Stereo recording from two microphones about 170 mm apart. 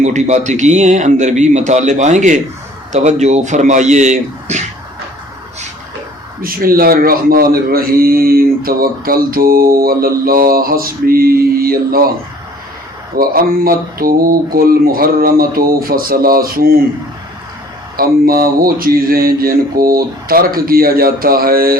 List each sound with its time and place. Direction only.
0.0 s speech: 45° right (ahead or behind)
6.4 s a man's voice: 60° right (ahead or behind)
13.1 s a man's voice: 60° right (ahead or behind)
17.9 s a man's voice: 60° right (ahead or behind)